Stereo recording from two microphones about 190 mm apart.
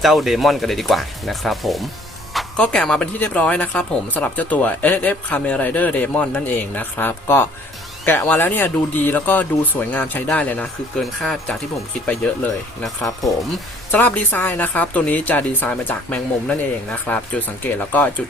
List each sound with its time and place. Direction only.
0.0 s speech: centre (ahead or behind)
12.8 s speech: centre (ahead or behind)